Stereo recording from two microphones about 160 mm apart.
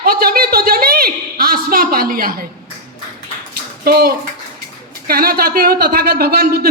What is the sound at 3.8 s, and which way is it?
A child's voice, 75° right (ahead or behind).